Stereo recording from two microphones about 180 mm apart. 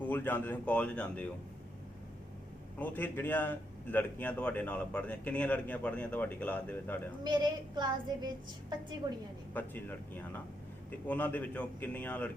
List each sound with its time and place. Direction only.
0.0 s speech: 10° left (ahead or behind)
2.7 s speech: 10° left (ahead or behind)
7.3 s speech: 25° right (ahead or behind)
9.5 s speech: 10° left (ahead or behind)
11.1 s speech: 10° left (ahead or behind)